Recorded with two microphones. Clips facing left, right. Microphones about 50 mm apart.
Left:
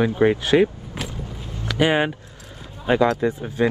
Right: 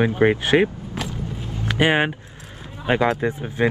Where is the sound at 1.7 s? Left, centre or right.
Right.